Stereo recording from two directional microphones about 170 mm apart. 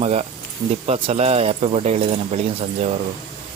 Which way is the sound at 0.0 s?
40° right (ahead or behind).